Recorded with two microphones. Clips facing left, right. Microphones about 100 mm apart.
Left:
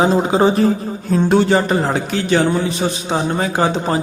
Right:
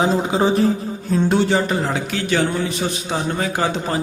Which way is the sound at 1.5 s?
40° left (ahead or behind).